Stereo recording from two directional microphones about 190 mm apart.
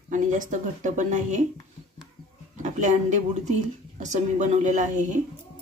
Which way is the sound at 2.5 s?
40° right (ahead or behind).